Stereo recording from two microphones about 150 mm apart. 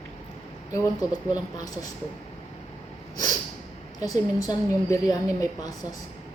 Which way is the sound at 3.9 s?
25° left (ahead or behind).